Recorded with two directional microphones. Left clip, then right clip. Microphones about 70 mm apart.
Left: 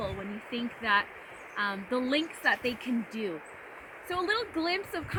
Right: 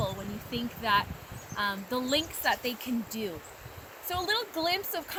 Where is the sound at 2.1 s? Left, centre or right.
Right.